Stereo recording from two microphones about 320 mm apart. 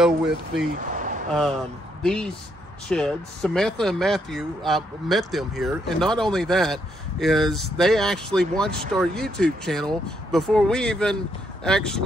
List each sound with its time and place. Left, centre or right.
0.0 s speech: centre
0.9 s a sound: right
2.9 s speech: centre